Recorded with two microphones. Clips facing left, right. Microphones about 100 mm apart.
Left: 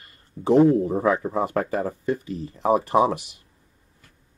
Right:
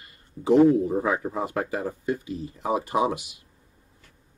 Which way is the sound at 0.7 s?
45° left (ahead or behind).